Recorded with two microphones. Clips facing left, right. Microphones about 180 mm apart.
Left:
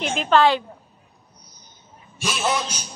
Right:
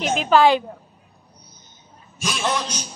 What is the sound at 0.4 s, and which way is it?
Speech, 15° right (ahead or behind).